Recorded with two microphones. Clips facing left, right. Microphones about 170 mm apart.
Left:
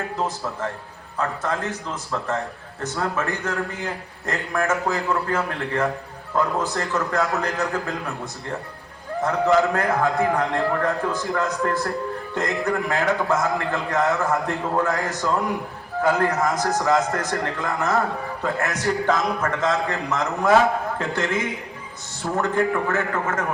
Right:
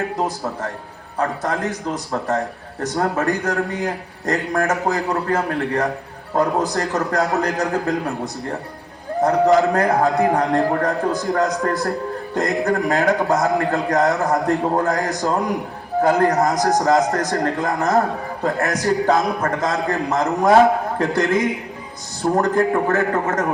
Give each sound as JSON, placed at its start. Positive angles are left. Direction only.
{"t": 1.1, "sound": "a man's voice", "side_deg": -35}